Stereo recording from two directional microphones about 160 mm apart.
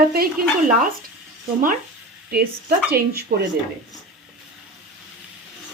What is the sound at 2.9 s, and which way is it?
Speech, 75° right (ahead or behind).